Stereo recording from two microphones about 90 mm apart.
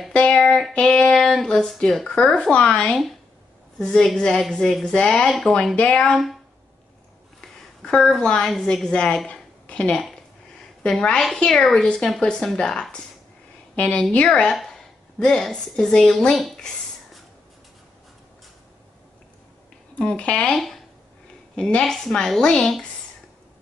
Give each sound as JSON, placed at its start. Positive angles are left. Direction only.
{"t": 0.1, "sound": "child singing", "side_deg": 15}
{"t": 5.3, "sound": "speech", "side_deg": 5}
{"t": 5.8, "sound": "child singing", "side_deg": 10}
{"t": 7.8, "sound": "child singing", "side_deg": 5}
{"t": 14.5, "sound": "a woman's voice", "side_deg": 0}
{"t": 20.0, "sound": "child singing", "side_deg": 10}